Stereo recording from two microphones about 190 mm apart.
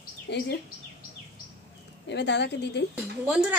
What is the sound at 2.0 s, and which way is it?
Speech, 65° left (ahead or behind).